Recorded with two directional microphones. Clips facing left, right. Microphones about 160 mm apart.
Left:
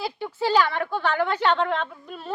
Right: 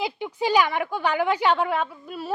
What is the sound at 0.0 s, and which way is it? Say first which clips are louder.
A woman's voice: right 1 dB; 15° right (ahead or behind).